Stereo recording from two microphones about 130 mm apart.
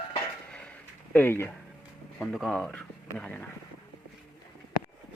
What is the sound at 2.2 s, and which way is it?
Speech, centre (ahead or behind).